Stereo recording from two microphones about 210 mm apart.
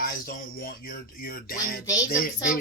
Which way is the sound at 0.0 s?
45° left (ahead or behind).